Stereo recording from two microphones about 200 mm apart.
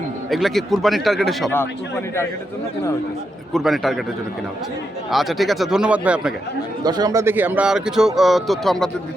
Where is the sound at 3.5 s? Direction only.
Centre (ahead or behind).